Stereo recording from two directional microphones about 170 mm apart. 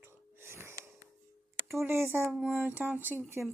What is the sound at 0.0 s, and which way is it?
Wheeze, 15° right (ahead or behind).